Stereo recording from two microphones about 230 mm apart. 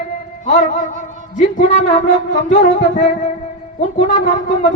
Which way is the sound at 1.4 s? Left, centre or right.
Left.